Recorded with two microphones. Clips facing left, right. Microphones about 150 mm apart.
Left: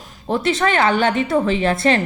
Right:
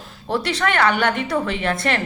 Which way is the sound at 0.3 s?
20° left (ahead or behind).